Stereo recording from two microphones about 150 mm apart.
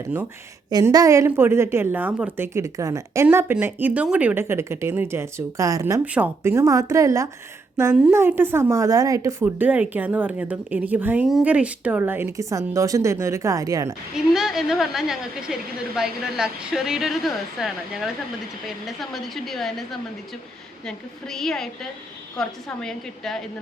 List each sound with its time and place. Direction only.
0.7 s speech: 25° right (ahead or behind)
6.1 s speech: 10° right (ahead or behind)
14.3 s speech: 5° right (ahead or behind)